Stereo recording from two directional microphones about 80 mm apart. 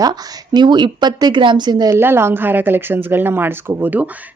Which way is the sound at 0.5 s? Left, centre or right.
Right.